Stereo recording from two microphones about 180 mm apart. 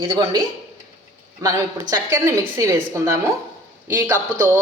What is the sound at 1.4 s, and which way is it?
A woman's voice, 20° right (ahead or behind).